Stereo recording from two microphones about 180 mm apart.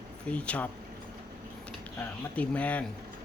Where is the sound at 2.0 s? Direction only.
10° left (ahead or behind).